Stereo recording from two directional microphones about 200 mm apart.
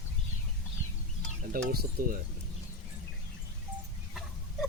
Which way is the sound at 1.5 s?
45° right (ahead or behind).